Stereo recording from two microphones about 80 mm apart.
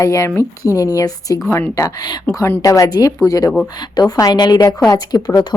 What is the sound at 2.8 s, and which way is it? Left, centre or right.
Speech, left.